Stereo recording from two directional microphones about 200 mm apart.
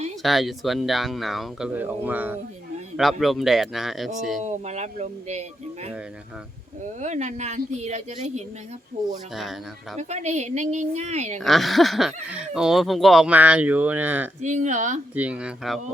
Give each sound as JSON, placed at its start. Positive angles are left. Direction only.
{"t": 0.2, "sound": "speech", "side_deg": 0}
{"t": 4.4, "sound": "speech", "side_deg": -35}
{"t": 7.0, "sound": "speech", "side_deg": -35}
{"t": 9.3, "sound": "speech", "side_deg": 0}
{"t": 10.0, "sound": "speech", "side_deg": -35}
{"t": 11.3, "sound": "speech", "side_deg": 0}
{"t": 14.4, "sound": "speech", "side_deg": -35}
{"t": 15.1, "sound": "speech", "side_deg": -5}